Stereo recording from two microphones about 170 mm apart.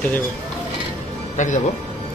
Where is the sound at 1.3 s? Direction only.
45° left (ahead or behind).